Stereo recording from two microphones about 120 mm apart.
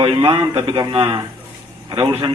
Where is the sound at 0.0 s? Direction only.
50° right (ahead or behind).